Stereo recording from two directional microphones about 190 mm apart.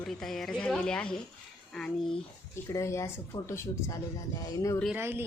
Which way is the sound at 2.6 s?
15° left (ahead or behind).